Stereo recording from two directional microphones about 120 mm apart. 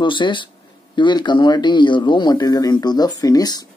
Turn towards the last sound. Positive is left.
turn(degrees=35)  # may be behind; listen again after turning